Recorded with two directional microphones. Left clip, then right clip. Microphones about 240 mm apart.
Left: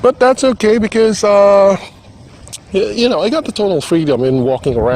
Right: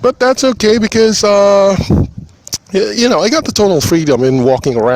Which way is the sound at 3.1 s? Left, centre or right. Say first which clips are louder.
Right 3 dB; right.